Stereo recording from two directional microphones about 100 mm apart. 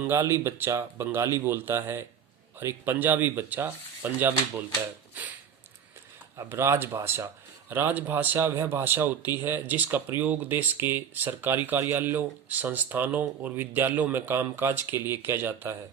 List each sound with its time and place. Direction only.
0.0 s speech: 25° right (ahead or behind)
6.3 s speech: 30° right (ahead or behind)